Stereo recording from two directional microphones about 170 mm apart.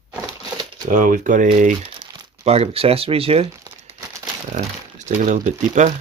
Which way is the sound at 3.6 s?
20° right (ahead or behind).